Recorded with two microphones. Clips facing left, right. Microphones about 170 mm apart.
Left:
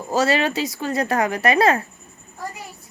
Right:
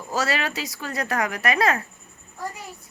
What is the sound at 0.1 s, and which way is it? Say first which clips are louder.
A woman's voice: left 6 dB; 25° left (ahead or behind).